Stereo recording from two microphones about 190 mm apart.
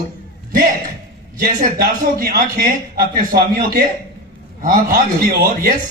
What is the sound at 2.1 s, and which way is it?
A man's voice, 50° right (ahead or behind).